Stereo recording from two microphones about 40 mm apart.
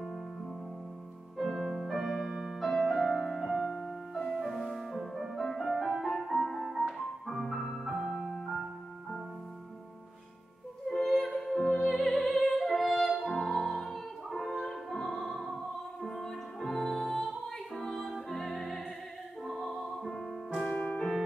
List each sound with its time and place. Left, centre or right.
1.4 s music: centre
6.7 s music: centre
7.2 s music: centre
7.7 s music: centre
10.9 s music: centre
11.6 s music: centre
12.0 s opera: centre
16.0 s music: centre
18.3 s music: centre
20.7 s music: left